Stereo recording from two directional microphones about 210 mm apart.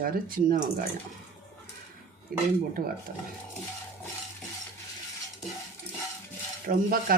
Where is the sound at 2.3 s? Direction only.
45° right (ahead or behind).